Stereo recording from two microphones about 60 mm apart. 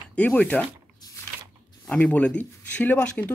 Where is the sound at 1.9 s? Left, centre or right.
Centre.